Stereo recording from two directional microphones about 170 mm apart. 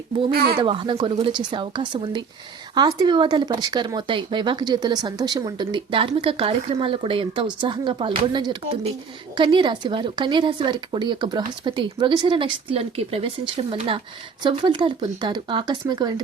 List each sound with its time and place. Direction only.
0.3 s speech: 65° right (ahead or behind)
0.6 s speech: 30° right (ahead or behind)